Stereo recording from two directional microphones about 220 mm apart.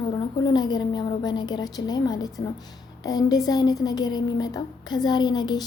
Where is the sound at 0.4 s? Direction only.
20° left (ahead or behind).